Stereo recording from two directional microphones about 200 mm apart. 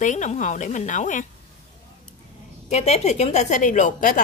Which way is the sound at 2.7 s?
35° left (ahead or behind).